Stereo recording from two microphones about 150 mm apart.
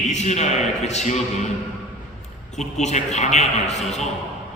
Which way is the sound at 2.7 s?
50° left (ahead or behind).